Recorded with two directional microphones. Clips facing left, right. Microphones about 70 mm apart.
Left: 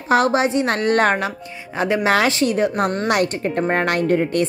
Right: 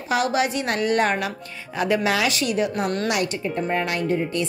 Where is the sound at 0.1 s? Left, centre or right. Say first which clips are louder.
Left 5 dB; left.